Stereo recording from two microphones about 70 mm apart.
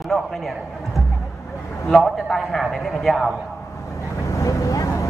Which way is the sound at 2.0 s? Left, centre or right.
Centre.